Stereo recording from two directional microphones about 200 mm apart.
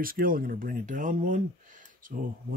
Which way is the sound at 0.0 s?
45° right (ahead or behind).